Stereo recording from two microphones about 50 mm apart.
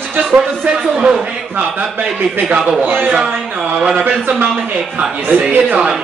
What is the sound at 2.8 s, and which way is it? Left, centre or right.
Speech, right.